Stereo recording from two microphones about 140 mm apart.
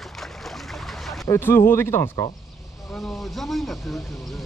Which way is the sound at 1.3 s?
15° left (ahead or behind).